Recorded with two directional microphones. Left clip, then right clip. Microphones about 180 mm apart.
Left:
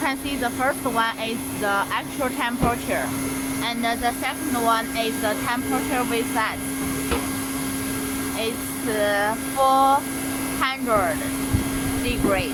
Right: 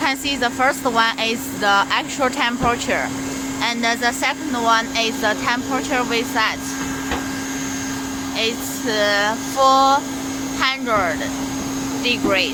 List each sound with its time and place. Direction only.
0.0 s speech: 15° right (ahead or behind)
8.4 s speech: 10° right (ahead or behind)